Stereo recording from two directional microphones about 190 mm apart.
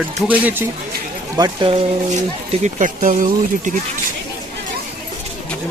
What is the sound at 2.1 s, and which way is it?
Speech, 40° right (ahead or behind).